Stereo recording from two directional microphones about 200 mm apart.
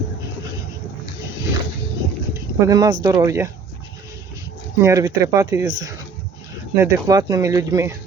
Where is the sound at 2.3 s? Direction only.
20° right (ahead or behind).